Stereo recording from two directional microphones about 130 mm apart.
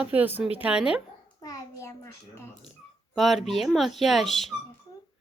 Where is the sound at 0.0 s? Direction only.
10° right (ahead or behind).